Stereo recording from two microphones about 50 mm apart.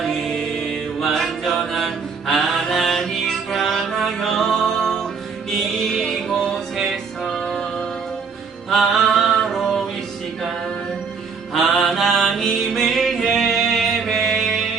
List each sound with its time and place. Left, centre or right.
0.0 s mantra: centre
5.5 s music: centre
8.7 s a sound: centre
11.5 s mantra: centre